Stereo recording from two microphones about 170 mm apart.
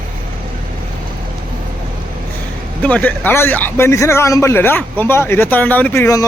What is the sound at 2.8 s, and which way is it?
A man's voice, 10° left (ahead or behind).